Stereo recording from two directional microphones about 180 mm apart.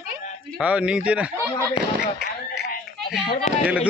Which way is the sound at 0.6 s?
5° right (ahead or behind).